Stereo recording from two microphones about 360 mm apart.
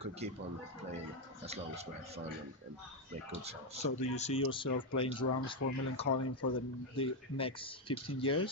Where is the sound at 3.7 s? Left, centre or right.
Centre.